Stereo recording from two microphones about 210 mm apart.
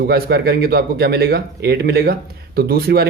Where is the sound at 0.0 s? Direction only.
50° right (ahead or behind).